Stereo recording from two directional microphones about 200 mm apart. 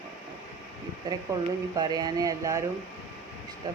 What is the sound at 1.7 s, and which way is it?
Speech, 20° right (ahead or behind).